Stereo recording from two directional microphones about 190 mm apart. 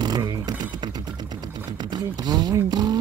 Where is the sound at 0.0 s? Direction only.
20° right (ahead or behind).